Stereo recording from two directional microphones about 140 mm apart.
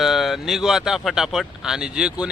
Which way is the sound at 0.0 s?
Centre (ahead or behind).